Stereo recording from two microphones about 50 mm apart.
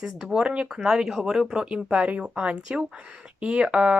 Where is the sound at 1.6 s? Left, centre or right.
Right.